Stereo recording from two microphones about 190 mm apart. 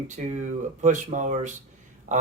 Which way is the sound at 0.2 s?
40° right (ahead or behind).